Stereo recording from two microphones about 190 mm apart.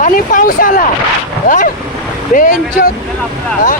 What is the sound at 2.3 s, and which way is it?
Speech, 45° left (ahead or behind).